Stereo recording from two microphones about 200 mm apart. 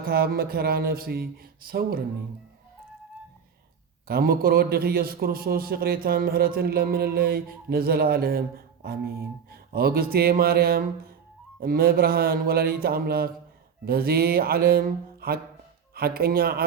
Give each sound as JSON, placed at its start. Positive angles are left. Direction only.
{"t": 0.0, "sound": "a man's voice", "side_deg": -50}
{"t": 4.1, "sound": "a man's voice", "side_deg": -50}